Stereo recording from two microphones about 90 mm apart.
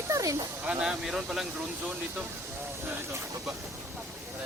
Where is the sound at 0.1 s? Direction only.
35° right (ahead or behind).